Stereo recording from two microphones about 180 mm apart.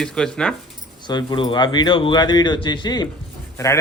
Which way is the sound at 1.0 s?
25° left (ahead or behind).